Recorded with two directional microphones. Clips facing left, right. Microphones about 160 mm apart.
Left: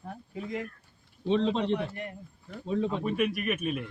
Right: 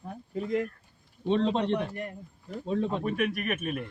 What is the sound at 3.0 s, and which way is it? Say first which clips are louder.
Speech: left 1 dB; 50° right (ahead or behind).